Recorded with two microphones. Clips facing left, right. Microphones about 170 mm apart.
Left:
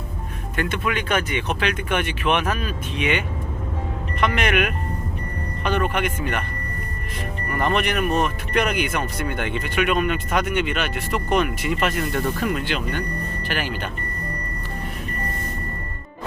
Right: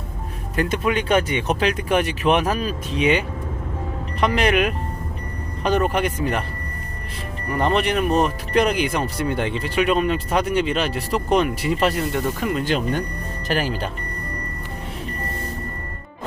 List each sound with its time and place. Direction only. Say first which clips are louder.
0.5 s speech: right 4 dB; 35° right (ahead or behind)
7.5 s speech: right 2 dB; 30° right (ahead or behind)
12.1 s speech: right 1 dB; 20° right (ahead or behind)
12.6 s speech: right 4 dB; 45° right (ahead or behind)